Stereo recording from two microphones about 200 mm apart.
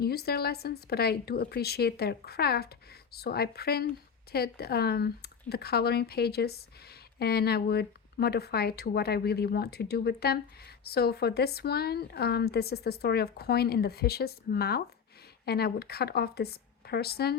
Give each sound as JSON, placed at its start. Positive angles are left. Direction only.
{"t": 0.0, "sound": "a woman's voice", "side_deg": 50}